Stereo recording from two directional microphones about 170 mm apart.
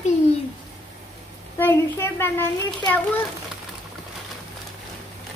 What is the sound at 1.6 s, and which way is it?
A child's voice, 15° left (ahead or behind).